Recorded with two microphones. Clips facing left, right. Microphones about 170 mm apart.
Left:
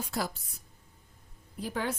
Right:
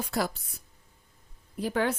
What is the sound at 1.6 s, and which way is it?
Speech, 70° right (ahead or behind).